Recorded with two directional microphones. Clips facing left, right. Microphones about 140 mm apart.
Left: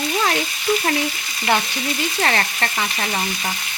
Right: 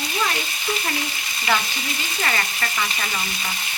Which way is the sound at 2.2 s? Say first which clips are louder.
Left 3 dB; 60° left (ahead or behind).